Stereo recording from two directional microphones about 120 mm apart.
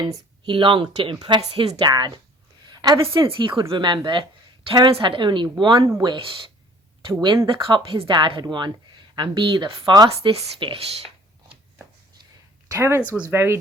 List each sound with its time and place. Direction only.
0.0 s speech: 40° right (ahead or behind)
2.6 s a sound: 35° right (ahead or behind)
3.1 s speech: 45° right (ahead or behind)
7.4 s speech: 45° right (ahead or behind)
10.1 s speech: 60° right (ahead or behind)
12.7 s speech: 25° right (ahead or behind)
13.0 s speech: 10° right (ahead or behind)